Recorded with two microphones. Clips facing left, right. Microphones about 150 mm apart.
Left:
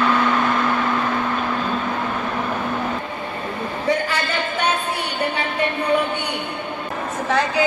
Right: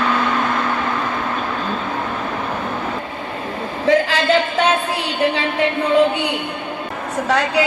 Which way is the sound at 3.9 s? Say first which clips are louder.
Right 7 dB; 90° right.